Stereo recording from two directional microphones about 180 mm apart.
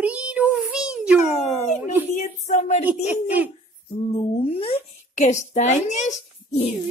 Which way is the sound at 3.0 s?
10° right (ahead or behind).